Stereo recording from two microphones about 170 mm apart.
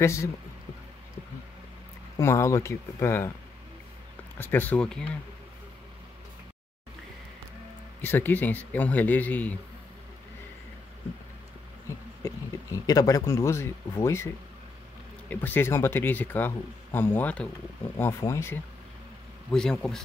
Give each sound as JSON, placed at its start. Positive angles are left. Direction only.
{"t": 0.0, "sound": "speech", "side_deg": 15}
{"t": 2.1, "sound": "speech", "side_deg": 15}
{"t": 4.4, "sound": "speech", "side_deg": 10}
{"t": 8.0, "sound": "speech", "side_deg": 10}
{"t": 12.2, "sound": "speech", "side_deg": 20}
{"t": 19.5, "sound": "speech", "side_deg": 5}